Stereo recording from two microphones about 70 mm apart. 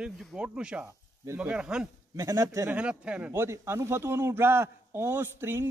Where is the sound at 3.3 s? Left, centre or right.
Right.